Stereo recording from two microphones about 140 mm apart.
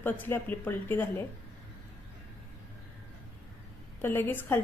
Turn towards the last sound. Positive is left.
turn(degrees=15)  # may be behind; listen again after turning